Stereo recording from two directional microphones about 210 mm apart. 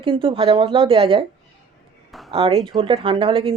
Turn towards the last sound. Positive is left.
turn(degrees=-25)  # may be behind; listen again after turning